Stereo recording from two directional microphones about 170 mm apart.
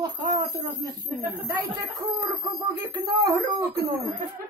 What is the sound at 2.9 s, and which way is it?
Speech, 25° right (ahead or behind).